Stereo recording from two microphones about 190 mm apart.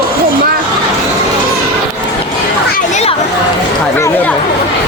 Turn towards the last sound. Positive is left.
turn(degrees=10)  # may be behind; listen again after turning